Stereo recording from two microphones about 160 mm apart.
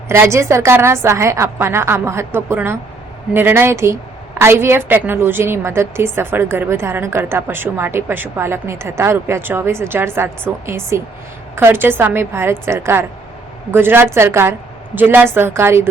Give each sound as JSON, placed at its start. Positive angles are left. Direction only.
{"t": 0.1, "sound": "a woman's voice", "side_deg": -15}